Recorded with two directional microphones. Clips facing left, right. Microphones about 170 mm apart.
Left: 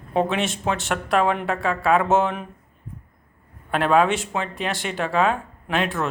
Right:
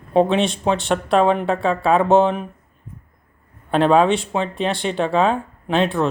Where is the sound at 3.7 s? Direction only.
25° right (ahead or behind).